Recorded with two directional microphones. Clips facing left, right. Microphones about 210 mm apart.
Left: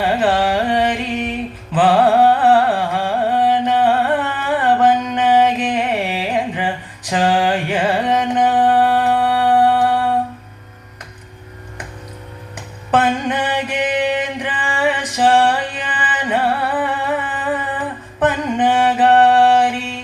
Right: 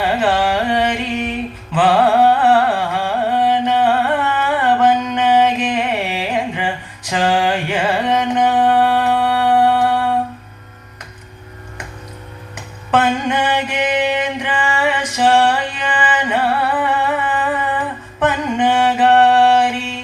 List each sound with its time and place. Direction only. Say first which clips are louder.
0.2 s carnatic music: even; 35° left (ahead or behind)
7.1 s music: even; 35° left (ahead or behind)
12.5 s music: even; 35° left (ahead or behind)
18.2 s mantra: even; 35° left (ahead or behind)